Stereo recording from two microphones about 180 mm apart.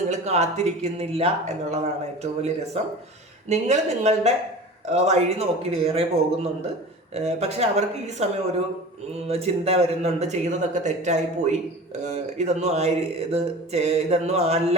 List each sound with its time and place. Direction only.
0.1 s speech: 40° right (ahead or behind)